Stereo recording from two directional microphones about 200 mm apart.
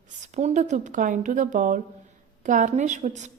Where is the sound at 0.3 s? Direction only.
35° right (ahead or behind).